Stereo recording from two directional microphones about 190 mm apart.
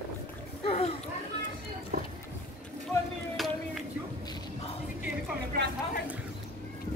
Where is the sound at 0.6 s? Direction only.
30° left (ahead or behind).